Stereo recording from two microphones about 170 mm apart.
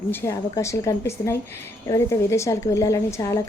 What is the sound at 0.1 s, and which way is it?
A woman's voice, 15° left (ahead or behind).